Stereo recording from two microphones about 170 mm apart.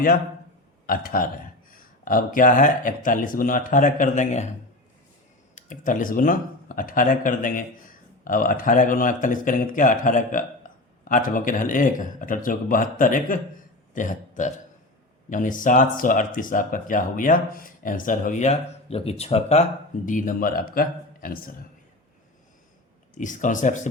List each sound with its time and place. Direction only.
0.9 s a man's voice: 55° left (ahead or behind)
5.5 s speech: 50° left (ahead or behind)
10.6 s a sound: 55° left (ahead or behind)
11.0 s speech: 50° left (ahead or behind)
20.1 s a man's voice: 50° left (ahead or behind)
23.1 s speech: 50° left (ahead or behind)